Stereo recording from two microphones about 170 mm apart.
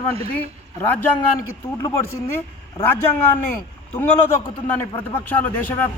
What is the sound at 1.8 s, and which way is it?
Speech, 20° left (ahead or behind).